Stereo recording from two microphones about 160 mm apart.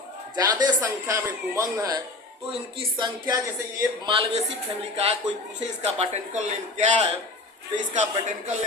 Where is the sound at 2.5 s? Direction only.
30° right (ahead or behind).